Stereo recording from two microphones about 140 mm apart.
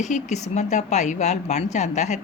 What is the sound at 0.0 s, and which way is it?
A woman's voice, 55° left (ahead or behind).